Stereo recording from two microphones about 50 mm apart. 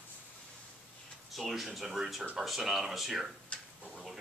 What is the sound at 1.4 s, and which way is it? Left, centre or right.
Speech, centre.